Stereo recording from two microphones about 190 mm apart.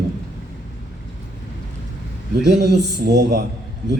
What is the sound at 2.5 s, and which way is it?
Speech, 60° right (ahead or behind).